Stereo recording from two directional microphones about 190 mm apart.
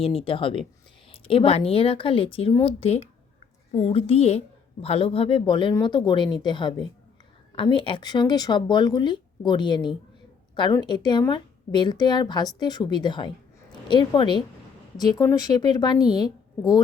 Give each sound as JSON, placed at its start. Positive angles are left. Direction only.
{"t": 0.0, "sound": "a woman's voice", "side_deg": 30}